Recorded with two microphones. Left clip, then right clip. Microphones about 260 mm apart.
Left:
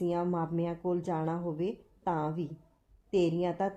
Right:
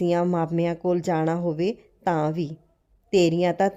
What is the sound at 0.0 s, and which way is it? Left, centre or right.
A woman's voice, right.